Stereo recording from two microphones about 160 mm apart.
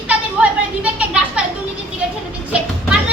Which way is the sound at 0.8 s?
10° right (ahead or behind).